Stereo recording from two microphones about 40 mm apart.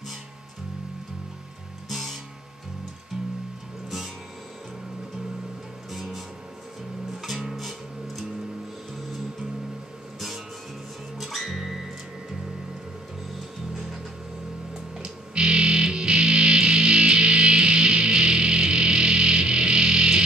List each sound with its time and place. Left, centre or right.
1.9 s music: centre
5.9 s music: centre
11.1 s music: centre
15.0 s music: right